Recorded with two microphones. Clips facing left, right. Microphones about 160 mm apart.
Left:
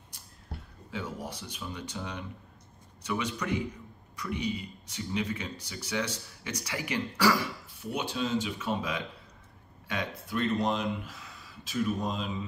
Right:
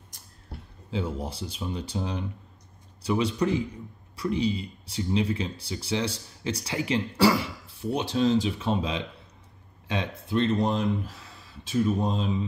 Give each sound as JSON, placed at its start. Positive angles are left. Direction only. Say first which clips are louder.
{"t": 0.9, "sound": "speech", "louder": "right 6 dB", "side_deg": -30}